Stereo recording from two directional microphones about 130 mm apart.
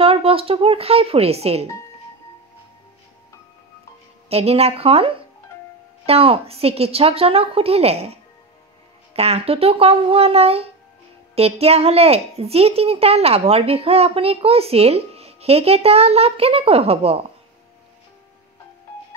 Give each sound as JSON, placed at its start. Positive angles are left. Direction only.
{"t": 0.0, "sound": "a child's voice", "side_deg": -45}
{"t": 4.3, "sound": "a child's voice", "side_deg": -50}